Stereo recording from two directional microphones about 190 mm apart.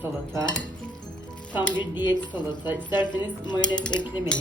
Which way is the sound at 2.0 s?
25° left (ahead or behind).